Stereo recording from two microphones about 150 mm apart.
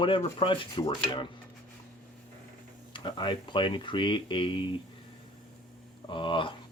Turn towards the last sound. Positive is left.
turn(degrees=35)  # may be behind; listen again after turning